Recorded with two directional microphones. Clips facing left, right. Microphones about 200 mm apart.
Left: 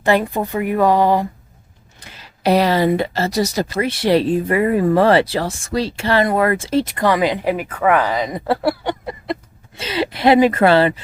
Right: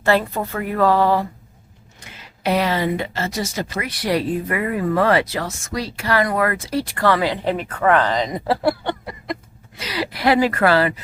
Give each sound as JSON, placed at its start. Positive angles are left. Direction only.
{"t": 0.0, "sound": "a woman's voice", "side_deg": 15}
{"t": 2.0, "sound": "speech", "side_deg": 35}
{"t": 3.8, "sound": "speech", "side_deg": 25}
{"t": 8.8, "sound": "a sound", "side_deg": 15}
{"t": 9.2, "sound": "speech", "side_deg": 30}